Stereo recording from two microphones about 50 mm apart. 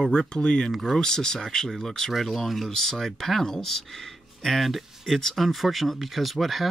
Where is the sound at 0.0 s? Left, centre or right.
Centre.